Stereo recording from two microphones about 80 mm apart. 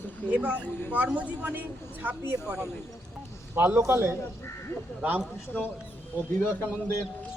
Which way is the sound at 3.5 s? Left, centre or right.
Right.